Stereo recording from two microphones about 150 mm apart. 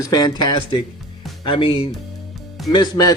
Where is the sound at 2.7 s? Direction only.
25° left (ahead or behind).